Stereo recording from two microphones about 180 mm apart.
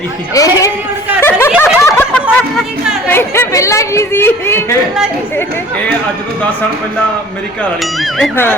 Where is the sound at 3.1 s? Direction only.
10° left (ahead or behind).